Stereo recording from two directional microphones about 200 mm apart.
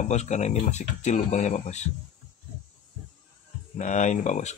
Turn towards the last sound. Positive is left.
turn(degrees=35)  # may be behind; listen again after turning